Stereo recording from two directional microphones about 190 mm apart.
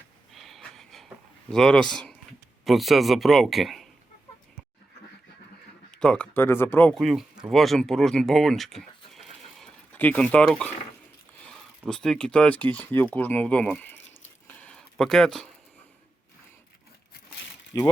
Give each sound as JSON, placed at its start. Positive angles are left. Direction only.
{"t": 0.3, "sound": "wheeze", "side_deg": 0}
{"t": 1.5, "sound": "speech", "side_deg": 5}
{"t": 6.0, "sound": "speech", "side_deg": 5}
{"t": 14.4, "sound": "a sound", "side_deg": 5}
{"t": 17.7, "sound": "speech", "side_deg": 20}